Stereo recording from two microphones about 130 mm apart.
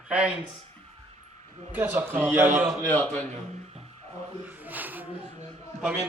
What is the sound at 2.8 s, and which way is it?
Speech, 15° left (ahead or behind).